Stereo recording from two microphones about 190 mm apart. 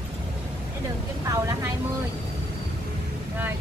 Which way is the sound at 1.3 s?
15° right (ahead or behind).